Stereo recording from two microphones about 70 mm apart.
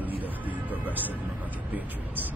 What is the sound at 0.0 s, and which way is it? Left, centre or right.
Music, right.